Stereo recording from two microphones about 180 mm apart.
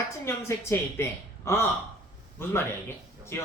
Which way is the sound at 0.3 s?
15° left (ahead or behind).